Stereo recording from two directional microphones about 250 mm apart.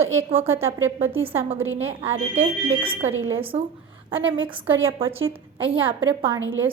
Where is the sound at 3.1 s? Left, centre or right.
Right.